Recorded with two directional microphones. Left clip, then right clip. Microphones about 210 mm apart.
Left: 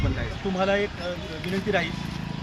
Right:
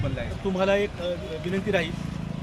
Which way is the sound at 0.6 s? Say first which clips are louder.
Right 1 dB; 30° right (ahead or behind).